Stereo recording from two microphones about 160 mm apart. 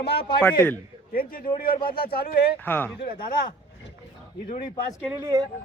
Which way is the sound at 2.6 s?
10° left (ahead or behind).